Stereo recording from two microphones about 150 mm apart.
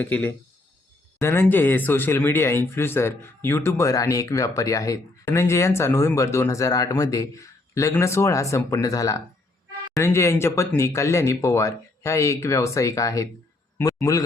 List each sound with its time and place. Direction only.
0.0 s a man's voice: 10° left (ahead or behind)